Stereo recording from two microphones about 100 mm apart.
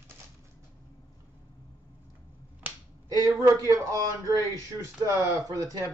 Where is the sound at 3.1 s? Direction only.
40° right (ahead or behind).